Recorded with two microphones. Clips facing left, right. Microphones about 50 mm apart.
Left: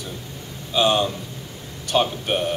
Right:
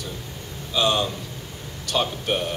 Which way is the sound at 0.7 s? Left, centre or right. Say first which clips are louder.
Left 3 dB; centre.